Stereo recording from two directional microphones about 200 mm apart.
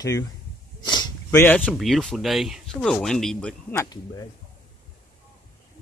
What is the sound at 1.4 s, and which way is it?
Speech, 10° left (ahead or behind).